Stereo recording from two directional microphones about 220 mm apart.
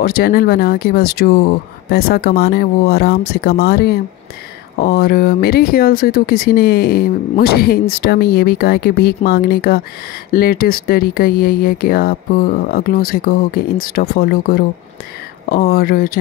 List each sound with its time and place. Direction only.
0.0 s speech: 45° left (ahead or behind)